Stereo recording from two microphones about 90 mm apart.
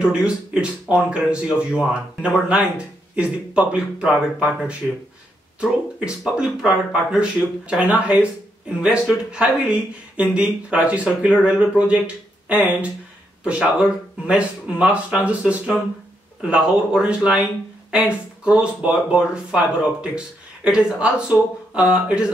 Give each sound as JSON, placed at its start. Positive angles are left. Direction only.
{"t": 0.0, "sound": "speech", "side_deg": -10}